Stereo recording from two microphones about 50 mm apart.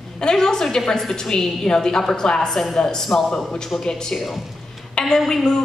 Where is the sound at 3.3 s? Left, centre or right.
Centre.